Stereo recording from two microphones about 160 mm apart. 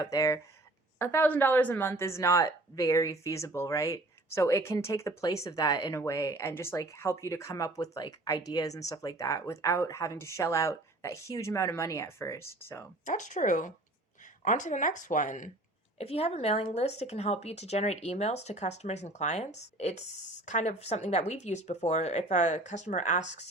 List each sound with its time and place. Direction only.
0.0 s a woman's voice: 20° left (ahead or behind)
13.1 s speech: 50° left (ahead or behind)
16.0 s speech: 40° left (ahead or behind)